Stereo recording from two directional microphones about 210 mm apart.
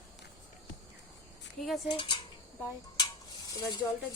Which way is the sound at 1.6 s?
Centre (ahead or behind).